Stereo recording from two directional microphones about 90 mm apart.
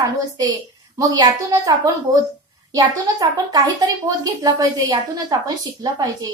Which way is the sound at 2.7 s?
45° right (ahead or behind).